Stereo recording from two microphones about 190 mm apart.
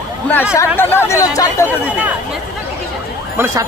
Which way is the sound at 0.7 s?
10° left (ahead or behind).